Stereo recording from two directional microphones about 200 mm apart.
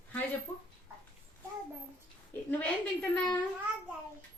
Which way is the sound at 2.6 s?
5° left (ahead or behind).